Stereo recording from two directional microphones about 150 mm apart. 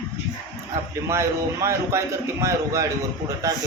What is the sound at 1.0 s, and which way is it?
Speech, 20° right (ahead or behind).